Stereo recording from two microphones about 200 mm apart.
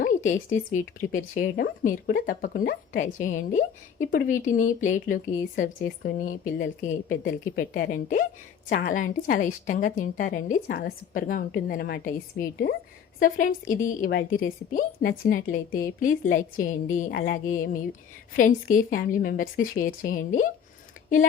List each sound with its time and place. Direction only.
0.0 s a woman's voice: 40° left (ahead or behind)
17.1 s a sound: 55° left (ahead or behind)
17.3 s a woman's voice: 40° left (ahead or behind)